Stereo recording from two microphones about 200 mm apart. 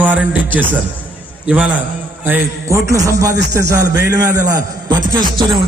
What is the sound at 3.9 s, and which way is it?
Music, 15° right (ahead or behind).